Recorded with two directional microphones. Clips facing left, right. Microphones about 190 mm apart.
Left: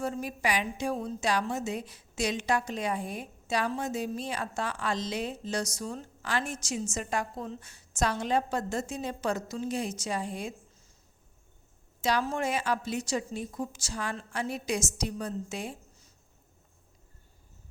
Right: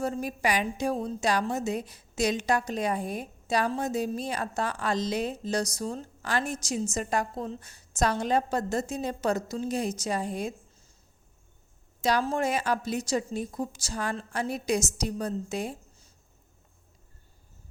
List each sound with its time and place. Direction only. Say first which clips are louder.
0.0 s a woman's voice: right 3 dB; 40° right (ahead or behind)
12.0 s a woman's voice: right 3 dB; 40° right (ahead or behind)